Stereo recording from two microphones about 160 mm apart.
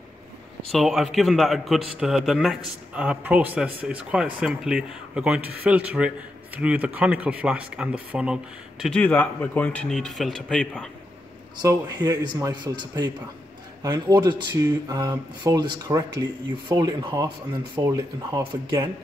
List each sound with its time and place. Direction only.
0.7 s a man's voice: centre (ahead or behind)
8.9 s a man's voice: 10° left (ahead or behind)
11.6 s speech: 20° right (ahead or behind)